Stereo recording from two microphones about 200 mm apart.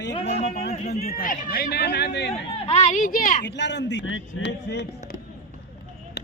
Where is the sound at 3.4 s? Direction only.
60° left (ahead or behind).